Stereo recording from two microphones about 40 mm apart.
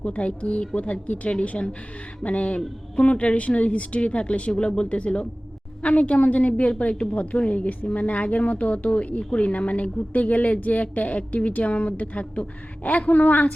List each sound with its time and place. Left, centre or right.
0.0 s a woman's voice: left
0.8 s a woman's voice: left